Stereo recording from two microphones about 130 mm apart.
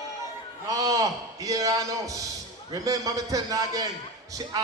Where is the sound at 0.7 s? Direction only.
30° right (ahead or behind).